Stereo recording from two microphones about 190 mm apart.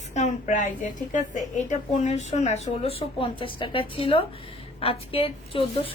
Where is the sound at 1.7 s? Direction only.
35° left (ahead or behind).